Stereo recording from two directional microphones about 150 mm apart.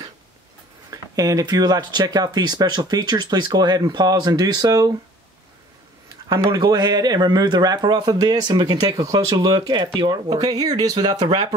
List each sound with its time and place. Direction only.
0.8 s speech: 25° right (ahead or behind)
6.2 s speech: 25° right (ahead or behind)